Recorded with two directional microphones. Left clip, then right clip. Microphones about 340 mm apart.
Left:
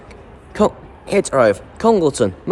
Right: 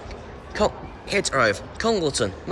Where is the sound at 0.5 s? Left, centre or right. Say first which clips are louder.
Left 6 dB; centre.